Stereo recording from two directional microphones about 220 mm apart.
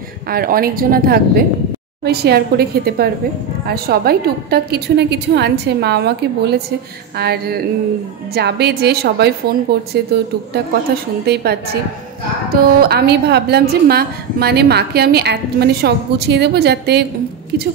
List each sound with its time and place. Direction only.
0.3 s a woman's voice: 40° right (ahead or behind)